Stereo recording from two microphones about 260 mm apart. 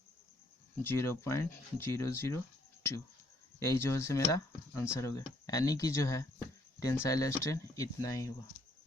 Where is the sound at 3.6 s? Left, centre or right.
Centre.